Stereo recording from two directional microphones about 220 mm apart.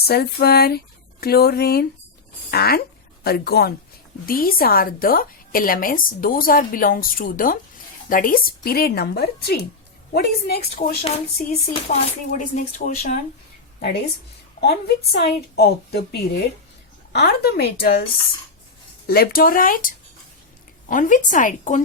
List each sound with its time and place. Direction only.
0.1 s a woman's voice: 45° left (ahead or behind)
11.7 s a woman's voice: 30° left (ahead or behind)
13.7 s a woman's voice: 45° left (ahead or behind)
19.0 s a woman's voice: 45° left (ahead or behind)